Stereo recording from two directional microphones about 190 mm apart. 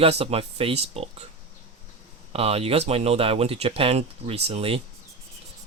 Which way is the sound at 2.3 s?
30° right (ahead or behind).